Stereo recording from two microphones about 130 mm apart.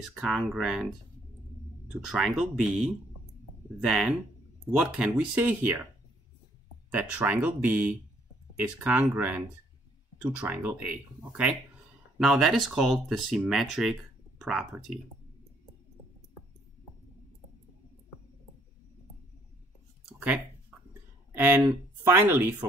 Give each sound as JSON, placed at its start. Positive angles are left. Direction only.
{"t": 0.2, "sound": "speech", "side_deg": 0}
{"t": 6.9, "sound": "speech", "side_deg": -10}
{"t": 10.4, "sound": "speech", "side_deg": -10}
{"t": 21.4, "sound": "speech", "side_deg": -15}